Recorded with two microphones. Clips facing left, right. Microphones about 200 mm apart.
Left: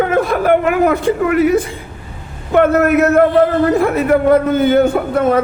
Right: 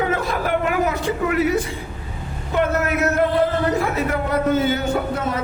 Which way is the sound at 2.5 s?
60° left (ahead or behind).